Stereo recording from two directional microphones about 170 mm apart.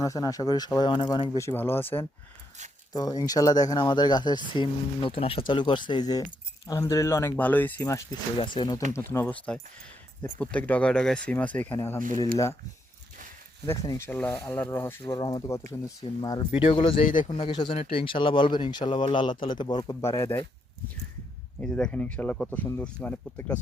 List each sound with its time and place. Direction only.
0.0 s speech: 20° left (ahead or behind)
1.4 s speech: 15° left (ahead or behind)
8.4 s speech: 30° left (ahead or behind)
9.0 s speech: 10° left (ahead or behind)
13.7 s speech: 15° left (ahead or behind)
21.6 s speech: 5° left (ahead or behind)